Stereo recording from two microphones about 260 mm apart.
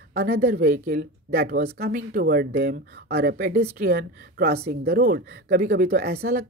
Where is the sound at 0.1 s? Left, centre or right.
Right.